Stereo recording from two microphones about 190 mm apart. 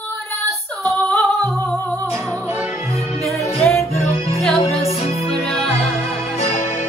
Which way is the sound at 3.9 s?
35° left (ahead or behind).